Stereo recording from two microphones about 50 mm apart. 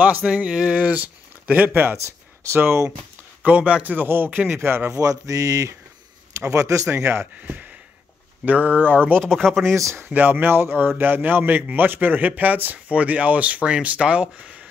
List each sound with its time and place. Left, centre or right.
0.0 s speech: right
0.8 s speech: right
2.5 s speech: right
3.4 s speech: right
3.9 s speech: right
4.9 s speech: right
7.4 s speech: right
9.2 s speech: centre
9.7 s speech: right
10.1 s speech: right